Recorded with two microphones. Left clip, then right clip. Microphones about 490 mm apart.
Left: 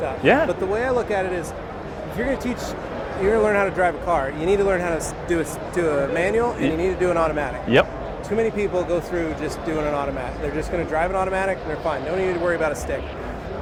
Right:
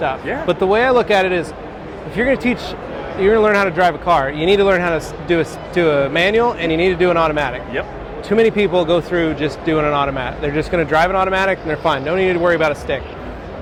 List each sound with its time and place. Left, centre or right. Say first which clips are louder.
0.3 s speech: left 7 dB; left
0.7 s speech: right 8 dB; right